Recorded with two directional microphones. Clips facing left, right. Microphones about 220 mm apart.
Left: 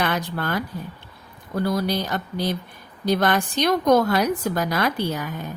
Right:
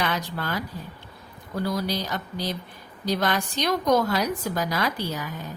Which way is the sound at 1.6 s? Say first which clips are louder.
Left 4 dB; 55° left (ahead or behind).